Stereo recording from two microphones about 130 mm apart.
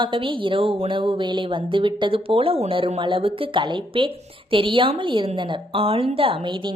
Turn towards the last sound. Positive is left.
turn(degrees=-40)  # may be behind; listen again after turning